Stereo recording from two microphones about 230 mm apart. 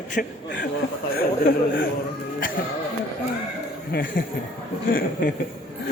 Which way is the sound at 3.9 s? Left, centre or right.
Left.